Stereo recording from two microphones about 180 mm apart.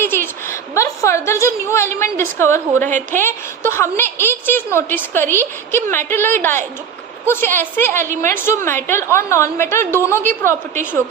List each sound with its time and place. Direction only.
0.0 s a woman's voice: 15° left (ahead or behind)
2.8 s a woman's voice: 45° right (ahead or behind)
3.2 s a woman's voice: 15° left (ahead or behind)